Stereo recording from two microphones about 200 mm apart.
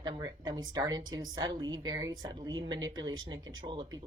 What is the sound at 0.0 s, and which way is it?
A woman's voice, 20° right (ahead or behind).